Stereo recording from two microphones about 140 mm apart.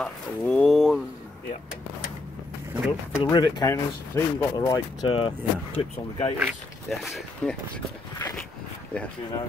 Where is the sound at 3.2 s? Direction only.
30° left (ahead or behind).